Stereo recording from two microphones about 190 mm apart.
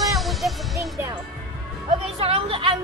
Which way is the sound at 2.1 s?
30° right (ahead or behind).